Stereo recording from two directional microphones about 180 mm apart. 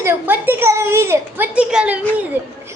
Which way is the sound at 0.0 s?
10° right (ahead or behind).